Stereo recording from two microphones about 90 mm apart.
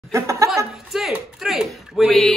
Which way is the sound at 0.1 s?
35° right (ahead or behind).